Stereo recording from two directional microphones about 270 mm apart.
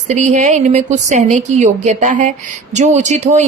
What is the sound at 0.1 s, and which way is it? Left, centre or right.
Speech, right.